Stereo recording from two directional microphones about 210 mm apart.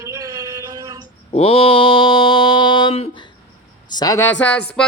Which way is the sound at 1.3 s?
30° left (ahead or behind).